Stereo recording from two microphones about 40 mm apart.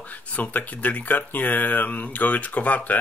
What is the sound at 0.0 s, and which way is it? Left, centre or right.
Speech, left.